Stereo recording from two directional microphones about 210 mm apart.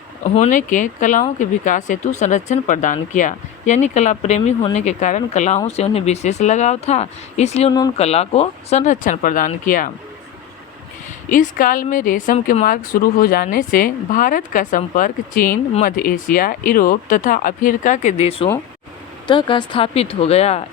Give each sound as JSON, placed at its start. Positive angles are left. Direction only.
{"t": 0.3, "sound": "a woman's voice", "side_deg": 35}
{"t": 7.7, "sound": "speech", "side_deg": 20}
{"t": 7.9, "sound": "a woman's voice", "side_deg": 30}
{"t": 11.3, "sound": "a woman's voice", "side_deg": 40}